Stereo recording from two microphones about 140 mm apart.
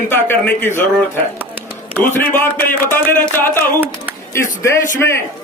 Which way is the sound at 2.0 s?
15° left (ahead or behind).